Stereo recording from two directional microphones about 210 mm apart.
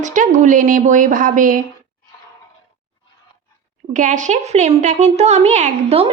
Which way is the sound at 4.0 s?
35° right (ahead or behind).